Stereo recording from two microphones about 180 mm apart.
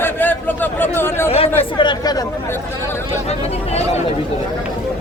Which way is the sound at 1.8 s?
25° left (ahead or behind).